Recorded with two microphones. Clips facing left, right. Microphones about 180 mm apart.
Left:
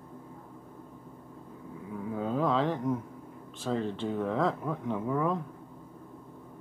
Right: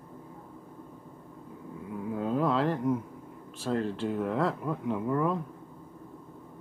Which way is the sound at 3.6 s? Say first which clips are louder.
Right 1 dB; centre (ahead or behind).